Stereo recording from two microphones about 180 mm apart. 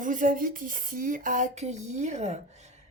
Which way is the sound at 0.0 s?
45° right (ahead or behind).